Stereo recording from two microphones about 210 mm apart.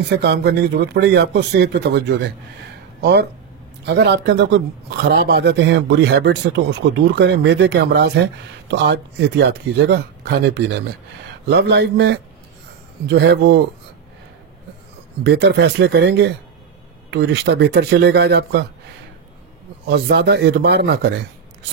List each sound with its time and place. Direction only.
0.2 s speech: 50° right (ahead or behind)
15.2 s speech: 55° right (ahead or behind)
19.9 s speech: 50° right (ahead or behind)